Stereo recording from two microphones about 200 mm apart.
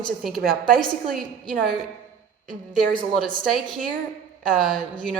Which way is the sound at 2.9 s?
5° left (ahead or behind).